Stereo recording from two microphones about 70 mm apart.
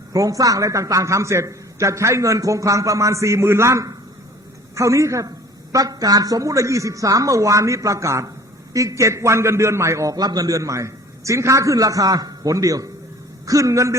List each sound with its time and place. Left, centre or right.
0.1 s speech: right
5.7 s speech: right
10.2 s speech: right